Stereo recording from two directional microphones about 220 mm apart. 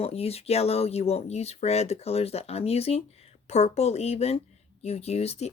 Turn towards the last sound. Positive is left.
turn(degrees=30)  # may be behind; listen again after turning